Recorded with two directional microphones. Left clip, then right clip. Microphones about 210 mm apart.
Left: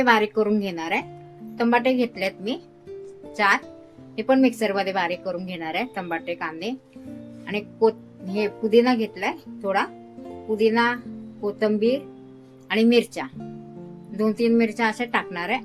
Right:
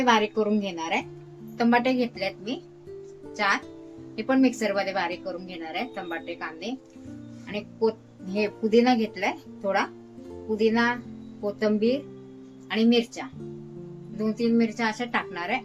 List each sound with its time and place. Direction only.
0.0 s speech: 20° left (ahead or behind)
2.1 s a woman's voice: 35° left (ahead or behind)
8.3 s speech: 10° left (ahead or behind)
12.6 s a woman's voice: 25° left (ahead or behind)